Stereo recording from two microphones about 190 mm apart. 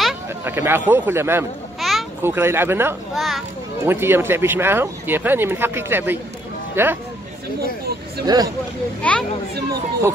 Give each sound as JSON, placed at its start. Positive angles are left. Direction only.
{"t": 0.5, "sound": "speech", "side_deg": -10}
{"t": 1.8, "sound": "a sound", "side_deg": 0}
{"t": 2.2, "sound": "speech", "side_deg": -10}
{"t": 3.2, "sound": "a child's voice", "side_deg": 0}
{"t": 3.8, "sound": "speech", "side_deg": -10}
{"t": 8.3, "sound": "speech", "side_deg": -20}
{"t": 9.0, "sound": "a child's voice", "side_deg": 5}